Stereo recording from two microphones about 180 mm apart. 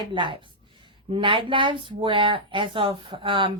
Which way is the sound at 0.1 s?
25° right (ahead or behind).